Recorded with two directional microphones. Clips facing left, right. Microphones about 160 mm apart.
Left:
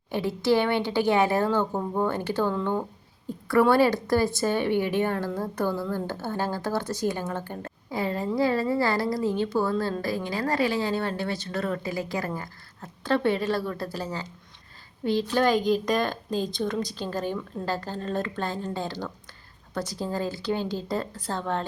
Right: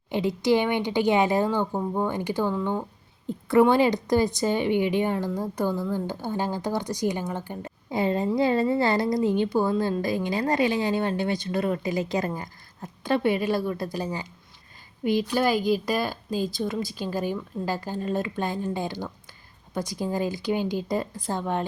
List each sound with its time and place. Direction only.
0.1 s a woman's voice: 15° right (ahead or behind)